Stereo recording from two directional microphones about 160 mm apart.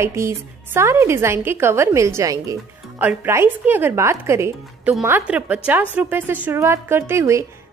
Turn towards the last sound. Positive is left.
turn(degrees=-15)  # may be behind; listen again after turning